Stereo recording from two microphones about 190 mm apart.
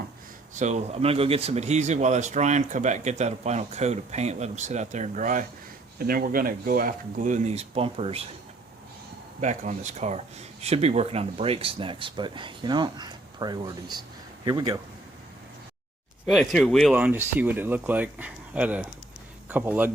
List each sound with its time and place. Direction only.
0.6 s speech: 35° right (ahead or behind)
9.4 s speech: 40° right (ahead or behind); by 14.8 s 20° right (ahead or behind)
16.2 s speech: centre (ahead or behind)
16.9 s speech: 10° right (ahead or behind)